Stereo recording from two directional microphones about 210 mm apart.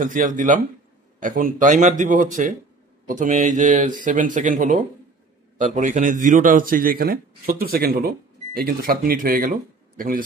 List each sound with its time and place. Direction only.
0.0 s a man's voice: 40° right (ahead or behind)